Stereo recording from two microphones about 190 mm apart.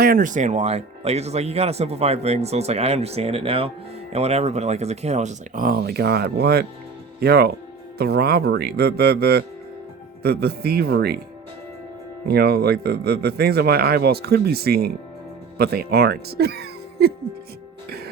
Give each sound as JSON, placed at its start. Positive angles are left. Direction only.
{"t": 0.0, "sound": "speech", "side_deg": -45}
{"t": 12.3, "sound": "speech", "side_deg": -55}
{"t": 17.8, "sound": "music", "side_deg": -55}